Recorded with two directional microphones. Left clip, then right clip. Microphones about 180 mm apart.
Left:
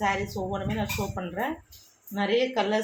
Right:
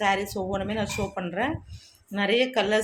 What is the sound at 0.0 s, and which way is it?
Speech, 50° right (ahead or behind).